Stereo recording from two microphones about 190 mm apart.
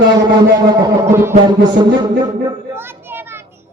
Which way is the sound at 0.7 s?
15° right (ahead or behind).